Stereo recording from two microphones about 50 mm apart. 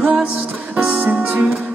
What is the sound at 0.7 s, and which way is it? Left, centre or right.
Music, centre.